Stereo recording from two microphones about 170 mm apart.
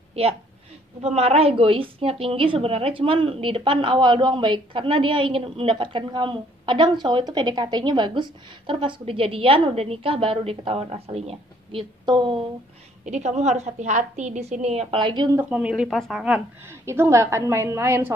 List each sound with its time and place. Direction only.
0.1 s a woman's voice: 35° right (ahead or behind)
13.0 s a woman's voice: 45° right (ahead or behind); by 15.4 s 25° right (ahead or behind)
15.5 s a woman's voice: 5° right (ahead or behind)